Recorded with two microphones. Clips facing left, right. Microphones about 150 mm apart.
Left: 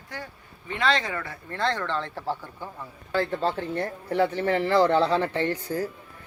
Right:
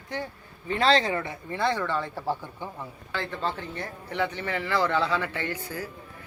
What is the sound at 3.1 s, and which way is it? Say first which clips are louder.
A man's voice: left 6 dB; 40° left (ahead or behind).